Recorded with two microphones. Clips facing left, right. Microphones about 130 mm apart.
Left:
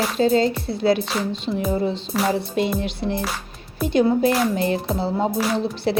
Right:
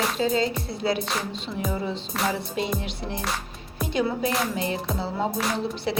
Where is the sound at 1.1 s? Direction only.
Centre (ahead or behind).